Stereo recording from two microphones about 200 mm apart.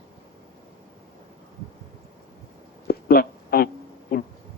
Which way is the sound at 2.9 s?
50° left (ahead or behind).